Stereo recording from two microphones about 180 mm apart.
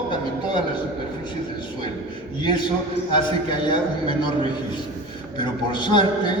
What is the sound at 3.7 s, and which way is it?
Speech, 25° left (ahead or behind).